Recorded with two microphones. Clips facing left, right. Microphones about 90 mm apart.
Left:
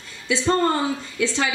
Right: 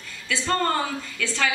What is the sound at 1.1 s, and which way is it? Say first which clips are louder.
Speech: left 2 dB; 20° left (ahead or behind).